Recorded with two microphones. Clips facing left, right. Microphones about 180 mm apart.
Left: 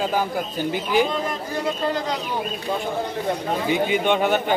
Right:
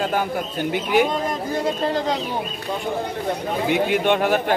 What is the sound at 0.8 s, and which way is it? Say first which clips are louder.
Speech: right 2 dB; 60° right (ahead or behind).